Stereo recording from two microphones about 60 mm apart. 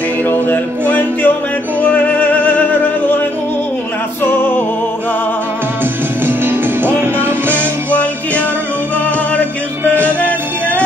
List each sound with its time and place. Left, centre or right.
0.2 s music: left
4.2 s music: left
6.2 s music: right